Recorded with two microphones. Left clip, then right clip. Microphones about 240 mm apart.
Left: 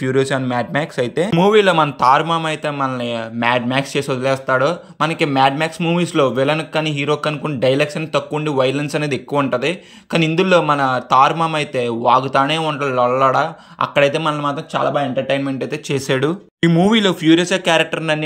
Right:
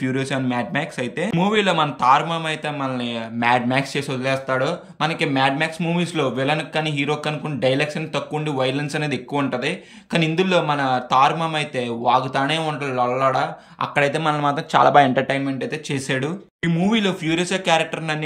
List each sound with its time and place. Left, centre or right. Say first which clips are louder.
0.0 s speech: left 6 dB; centre
15.3 s speech: left 4 dB; centre